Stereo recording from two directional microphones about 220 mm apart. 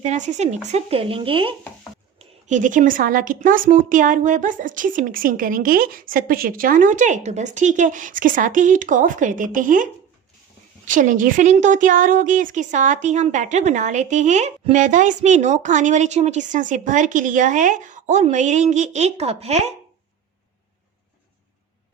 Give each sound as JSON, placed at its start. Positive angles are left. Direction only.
{"t": 0.0, "sound": "speech", "side_deg": -35}
{"t": 2.1, "sound": "a woman's voice", "side_deg": -35}